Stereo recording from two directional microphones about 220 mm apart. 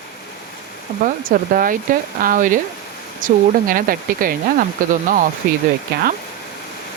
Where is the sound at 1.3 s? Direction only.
40° right (ahead or behind).